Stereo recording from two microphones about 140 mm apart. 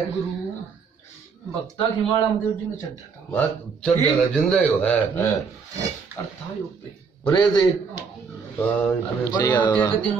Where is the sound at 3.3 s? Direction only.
10° left (ahead or behind).